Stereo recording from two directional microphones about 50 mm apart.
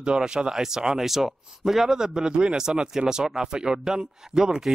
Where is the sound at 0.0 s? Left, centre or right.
Centre.